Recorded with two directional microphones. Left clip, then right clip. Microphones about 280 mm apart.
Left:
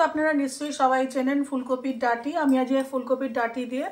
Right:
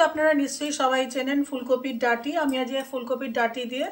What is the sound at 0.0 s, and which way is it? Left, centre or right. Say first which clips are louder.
Speech: right 2 dB; left.